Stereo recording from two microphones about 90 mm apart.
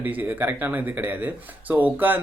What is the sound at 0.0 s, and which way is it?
Speech, 20° right (ahead or behind).